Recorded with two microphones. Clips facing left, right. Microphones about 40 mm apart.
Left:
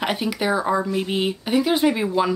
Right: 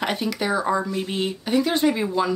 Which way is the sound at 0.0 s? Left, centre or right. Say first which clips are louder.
Left 2 dB; centre.